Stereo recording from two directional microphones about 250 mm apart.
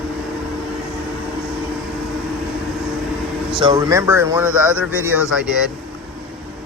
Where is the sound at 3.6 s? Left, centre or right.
Centre.